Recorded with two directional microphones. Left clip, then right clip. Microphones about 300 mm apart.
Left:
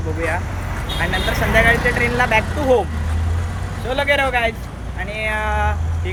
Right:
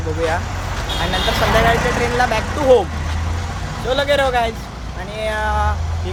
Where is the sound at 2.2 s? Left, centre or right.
Centre.